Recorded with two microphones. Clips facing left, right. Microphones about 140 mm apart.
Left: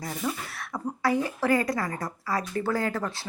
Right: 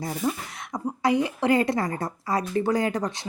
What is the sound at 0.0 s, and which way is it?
A woman's voice, 25° right (ahead or behind).